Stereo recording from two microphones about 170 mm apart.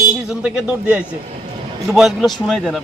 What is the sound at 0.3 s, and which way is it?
A man's voice, 5° right (ahead or behind).